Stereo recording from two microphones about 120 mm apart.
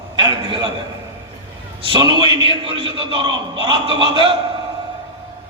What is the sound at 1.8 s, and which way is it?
A man's voice, 45° right (ahead or behind).